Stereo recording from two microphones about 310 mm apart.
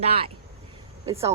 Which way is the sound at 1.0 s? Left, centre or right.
Centre.